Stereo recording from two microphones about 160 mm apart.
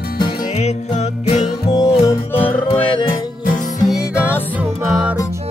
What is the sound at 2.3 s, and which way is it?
Music, 35° left (ahead or behind).